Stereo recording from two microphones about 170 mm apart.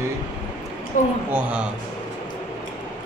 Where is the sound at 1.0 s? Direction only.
50° left (ahead or behind).